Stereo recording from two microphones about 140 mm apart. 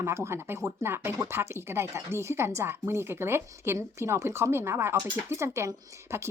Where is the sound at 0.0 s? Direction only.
20° right (ahead or behind).